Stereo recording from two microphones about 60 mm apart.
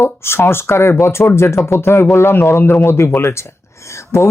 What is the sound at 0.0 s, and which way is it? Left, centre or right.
Speech, left.